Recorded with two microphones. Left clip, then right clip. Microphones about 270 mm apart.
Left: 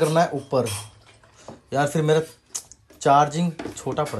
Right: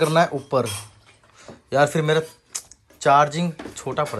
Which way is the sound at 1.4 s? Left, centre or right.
Centre.